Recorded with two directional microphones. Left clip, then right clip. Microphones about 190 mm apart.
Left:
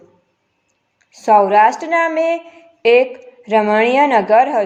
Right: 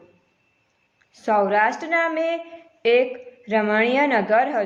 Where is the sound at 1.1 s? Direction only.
30° left (ahead or behind).